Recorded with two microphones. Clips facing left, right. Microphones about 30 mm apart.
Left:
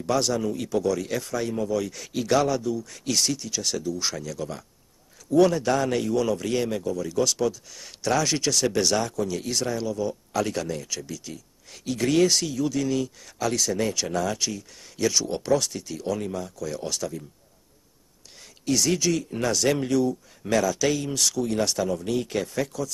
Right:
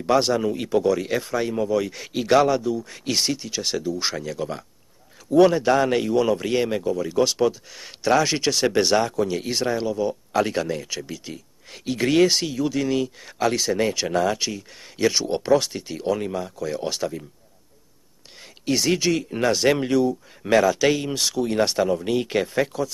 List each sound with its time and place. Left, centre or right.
0.0 s a man's voice: right
18.7 s a man's voice: right